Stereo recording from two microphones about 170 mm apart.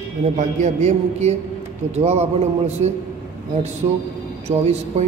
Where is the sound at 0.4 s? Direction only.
45° right (ahead or behind).